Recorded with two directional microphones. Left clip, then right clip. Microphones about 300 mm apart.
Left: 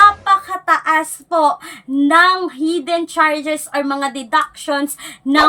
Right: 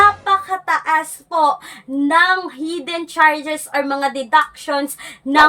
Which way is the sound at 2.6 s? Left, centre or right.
Centre.